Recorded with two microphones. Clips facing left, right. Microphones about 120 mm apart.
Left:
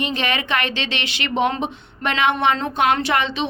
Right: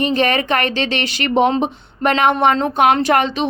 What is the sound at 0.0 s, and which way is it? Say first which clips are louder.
A woman's voice: right 7 dB; 40° right (ahead or behind).